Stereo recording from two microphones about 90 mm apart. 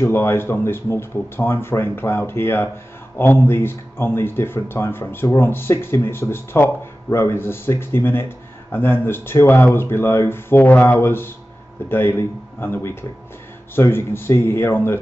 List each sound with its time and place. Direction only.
0.0 s speech: 30° left (ahead or behind)